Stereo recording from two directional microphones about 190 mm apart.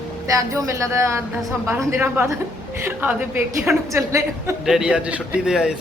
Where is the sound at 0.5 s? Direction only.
15° right (ahead or behind).